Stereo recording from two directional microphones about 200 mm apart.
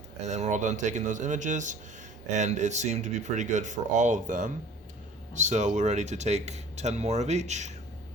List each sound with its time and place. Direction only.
0.3 s speech: 35° right (ahead or behind)